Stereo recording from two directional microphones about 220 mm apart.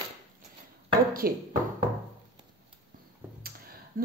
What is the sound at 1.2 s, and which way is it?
Speech, 40° right (ahead or behind).